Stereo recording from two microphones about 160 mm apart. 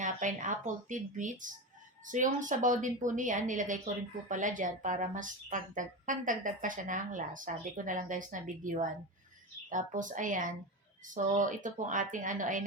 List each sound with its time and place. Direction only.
0.0 s a woman's voice: 50° right (ahead or behind)